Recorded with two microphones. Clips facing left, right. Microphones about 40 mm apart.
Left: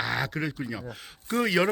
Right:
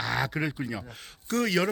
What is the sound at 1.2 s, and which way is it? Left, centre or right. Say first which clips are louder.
Speech: left 2 dB; centre.